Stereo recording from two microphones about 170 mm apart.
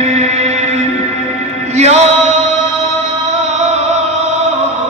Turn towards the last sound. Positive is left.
turn(degrees=-40)  # may be behind; listen again after turning